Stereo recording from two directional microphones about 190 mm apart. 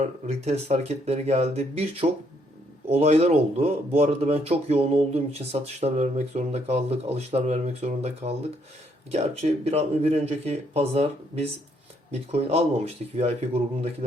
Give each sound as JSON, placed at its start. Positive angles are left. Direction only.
{"t": 0.0, "sound": "speech", "side_deg": -35}